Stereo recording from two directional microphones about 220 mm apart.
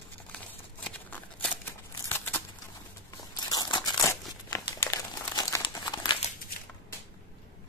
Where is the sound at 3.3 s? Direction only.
20° left (ahead or behind).